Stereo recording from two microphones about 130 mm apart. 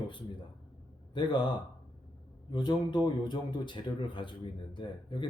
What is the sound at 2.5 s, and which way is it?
A man's voice, 35° left (ahead or behind).